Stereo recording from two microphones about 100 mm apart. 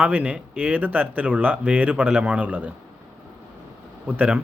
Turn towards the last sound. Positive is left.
turn(degrees=-15)  # may be behind; listen again after turning